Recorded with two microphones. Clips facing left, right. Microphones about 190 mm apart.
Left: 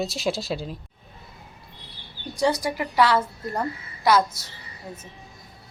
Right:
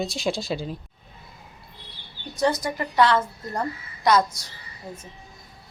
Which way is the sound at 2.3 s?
10° left (ahead or behind).